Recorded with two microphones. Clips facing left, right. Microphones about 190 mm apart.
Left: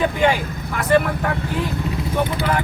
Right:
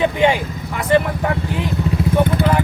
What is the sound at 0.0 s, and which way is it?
Speech, 25° right (ahead or behind).